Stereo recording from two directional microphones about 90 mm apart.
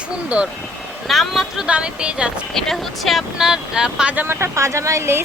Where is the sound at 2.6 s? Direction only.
5° left (ahead or behind); by 4.3 s 20° right (ahead or behind).